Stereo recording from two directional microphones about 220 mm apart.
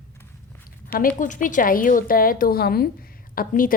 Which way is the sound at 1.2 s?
35° left (ahead or behind).